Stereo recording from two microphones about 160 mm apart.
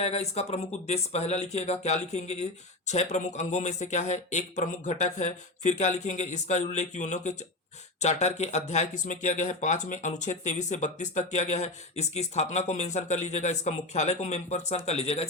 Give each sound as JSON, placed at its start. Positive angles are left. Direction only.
{"t": 0.0, "sound": "speech", "side_deg": 40}